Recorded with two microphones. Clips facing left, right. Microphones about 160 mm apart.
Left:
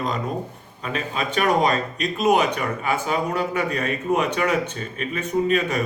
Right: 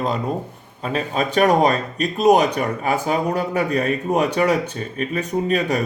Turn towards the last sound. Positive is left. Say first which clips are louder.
# right 1 dB
turn(degrees=-40)  # may be behind; listen again after turning